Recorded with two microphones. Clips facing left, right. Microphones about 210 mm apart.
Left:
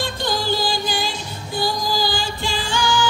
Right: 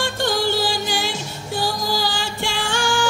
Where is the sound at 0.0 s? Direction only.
75° right (ahead or behind).